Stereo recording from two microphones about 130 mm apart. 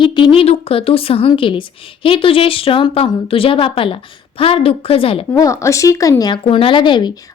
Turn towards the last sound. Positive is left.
turn(degrees=35)  # may be behind; listen again after turning